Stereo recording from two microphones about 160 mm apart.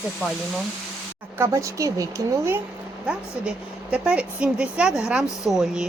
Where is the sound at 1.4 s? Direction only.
20° right (ahead or behind).